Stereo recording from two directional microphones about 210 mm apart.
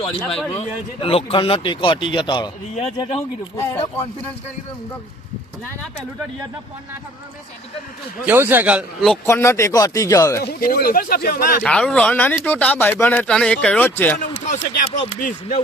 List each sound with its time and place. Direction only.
0.3 s a man's voice: centre (ahead or behind)
1.0 s speech: 25° left (ahead or behind)
3.6 s speech: 10° left (ahead or behind)
8.3 s a man's voice: 10° right (ahead or behind)
9.2 s speech: 15° left (ahead or behind)
10.4 s speech: 45° left (ahead or behind)
11.6 s speech: 5° left (ahead or behind)
14.2 s speech: 40° left (ahead or behind)